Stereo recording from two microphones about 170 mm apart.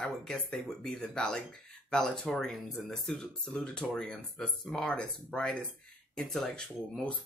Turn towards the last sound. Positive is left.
turn(degrees=5)  # may be behind; listen again after turning